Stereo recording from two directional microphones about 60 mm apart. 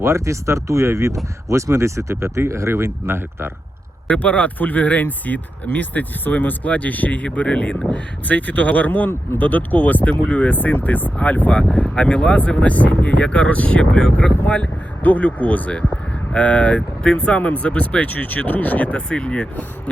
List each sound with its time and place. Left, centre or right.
0.0 s speech: right
4.1 s speech: left